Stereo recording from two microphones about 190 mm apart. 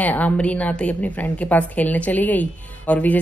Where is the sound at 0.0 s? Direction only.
10° left (ahead or behind).